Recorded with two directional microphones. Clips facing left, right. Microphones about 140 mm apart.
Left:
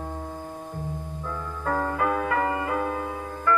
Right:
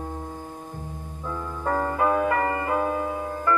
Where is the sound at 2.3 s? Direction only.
10° left (ahead or behind).